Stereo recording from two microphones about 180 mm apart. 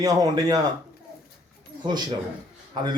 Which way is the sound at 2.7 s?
25° right (ahead or behind).